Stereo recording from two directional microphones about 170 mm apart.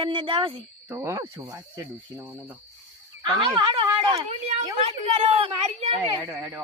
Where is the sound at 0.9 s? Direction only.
15° right (ahead or behind).